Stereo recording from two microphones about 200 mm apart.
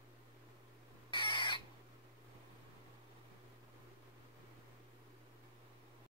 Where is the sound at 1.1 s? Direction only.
25° left (ahead or behind).